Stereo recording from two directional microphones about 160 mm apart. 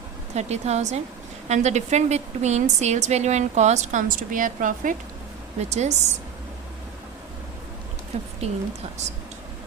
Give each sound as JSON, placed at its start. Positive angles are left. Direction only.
{"t": 0.3, "sound": "a woman's voice", "side_deg": -45}
{"t": 5.5, "sound": "a woman's voice", "side_deg": -45}
{"t": 8.4, "sound": "speech", "side_deg": -40}